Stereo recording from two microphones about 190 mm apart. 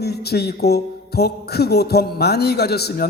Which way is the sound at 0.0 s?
55° left (ahead or behind).